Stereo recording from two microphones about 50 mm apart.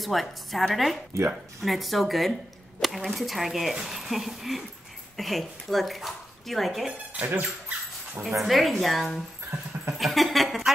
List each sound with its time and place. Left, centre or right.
0.0 s a woman's voice: centre
1.1 s speech: right
1.6 s a woman's voice: centre
7.2 s a sound: right
8.4 s a woman's voice: centre
9.9 s a sound: centre